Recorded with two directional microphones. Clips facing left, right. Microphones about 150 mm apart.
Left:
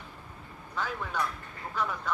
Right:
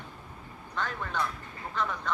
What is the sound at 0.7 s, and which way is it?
Speech, 5° left (ahead or behind).